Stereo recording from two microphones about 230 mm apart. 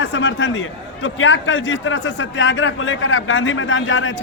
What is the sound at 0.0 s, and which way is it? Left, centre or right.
A man's voice, left.